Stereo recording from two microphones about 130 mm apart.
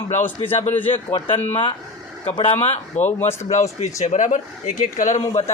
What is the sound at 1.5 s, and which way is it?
Speech, 45° left (ahead or behind).